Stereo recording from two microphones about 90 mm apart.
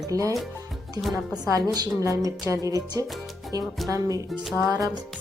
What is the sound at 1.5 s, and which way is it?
Speech, 40° right (ahead or behind).